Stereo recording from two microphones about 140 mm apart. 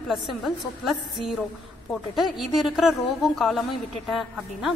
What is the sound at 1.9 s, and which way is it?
A woman's voice, centre (ahead or behind).